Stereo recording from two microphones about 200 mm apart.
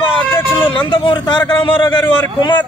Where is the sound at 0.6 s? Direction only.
25° left (ahead or behind).